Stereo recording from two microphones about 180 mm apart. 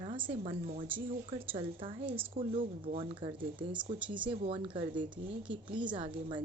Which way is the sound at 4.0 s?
5° right (ahead or behind).